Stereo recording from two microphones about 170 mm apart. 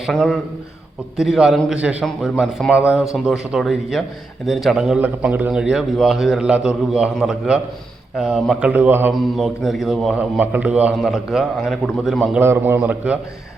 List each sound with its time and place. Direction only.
0.0 s a man's voice: centre (ahead or behind)
9.1 s a man's voice: centre (ahead or behind)
12.4 s speech: 15° right (ahead or behind)